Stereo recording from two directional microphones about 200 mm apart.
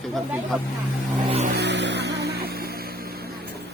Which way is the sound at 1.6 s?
60° right (ahead or behind).